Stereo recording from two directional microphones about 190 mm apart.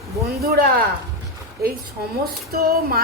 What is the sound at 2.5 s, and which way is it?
Speech, 55° right (ahead or behind).